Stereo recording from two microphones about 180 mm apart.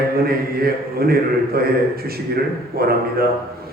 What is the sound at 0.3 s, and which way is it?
A man's voice, 60° right (ahead or behind).